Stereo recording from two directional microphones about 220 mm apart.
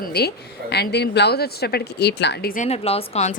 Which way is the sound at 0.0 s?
45° left (ahead or behind).